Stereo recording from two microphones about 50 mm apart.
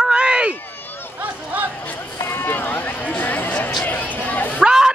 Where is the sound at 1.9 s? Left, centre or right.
Left.